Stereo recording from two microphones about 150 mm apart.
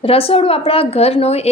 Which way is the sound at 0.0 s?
40° left (ahead or behind).